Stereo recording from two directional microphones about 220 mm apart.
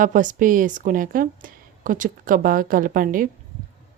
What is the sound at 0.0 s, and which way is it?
Speech, 35° right (ahead or behind).